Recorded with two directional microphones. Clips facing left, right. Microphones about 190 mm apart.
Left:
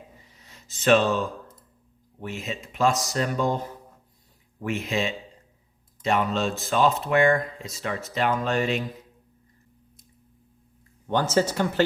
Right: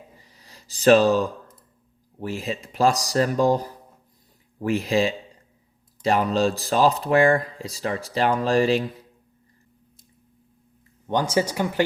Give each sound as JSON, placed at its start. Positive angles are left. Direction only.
{"t": 0.3, "sound": "speech", "side_deg": -35}
{"t": 11.0, "sound": "speech", "side_deg": -15}